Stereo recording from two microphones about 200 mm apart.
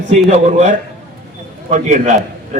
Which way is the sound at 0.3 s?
35° right (ahead or behind).